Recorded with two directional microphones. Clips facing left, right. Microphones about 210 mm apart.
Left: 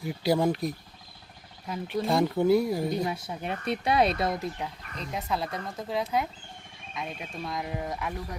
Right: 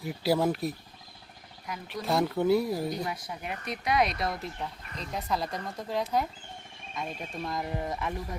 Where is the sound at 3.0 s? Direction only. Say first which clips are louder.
Left 4 dB; 25° left (ahead or behind).